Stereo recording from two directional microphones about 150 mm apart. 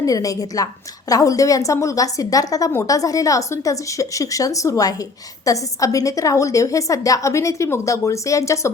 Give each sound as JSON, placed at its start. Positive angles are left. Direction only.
{"t": 0.0, "sound": "a woman's voice", "side_deg": 25}